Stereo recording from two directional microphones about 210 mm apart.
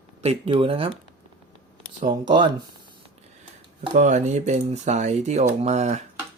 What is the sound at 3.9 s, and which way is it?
Speech, 35° right (ahead or behind).